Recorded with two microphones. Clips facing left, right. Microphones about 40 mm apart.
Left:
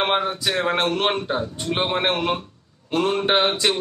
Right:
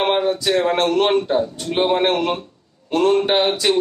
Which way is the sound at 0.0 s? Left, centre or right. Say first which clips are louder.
Right 3 dB; centre.